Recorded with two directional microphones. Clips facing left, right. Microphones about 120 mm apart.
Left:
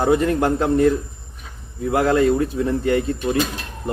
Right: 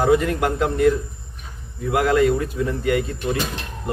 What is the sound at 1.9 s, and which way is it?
A man's voice, 35° left (ahead or behind).